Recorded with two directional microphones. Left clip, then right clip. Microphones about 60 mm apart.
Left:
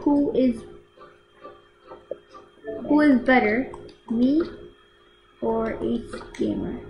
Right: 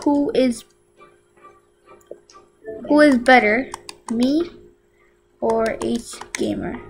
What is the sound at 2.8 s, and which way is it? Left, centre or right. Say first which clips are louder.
Speech: right 6 dB; right.